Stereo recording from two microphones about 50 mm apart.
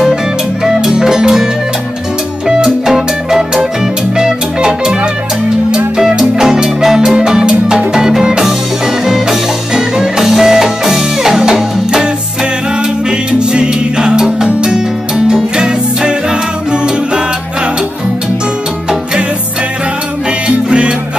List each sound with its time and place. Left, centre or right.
0.7 s music: centre
5.9 s music: centre
13.4 s music: centre
20.4 s music: right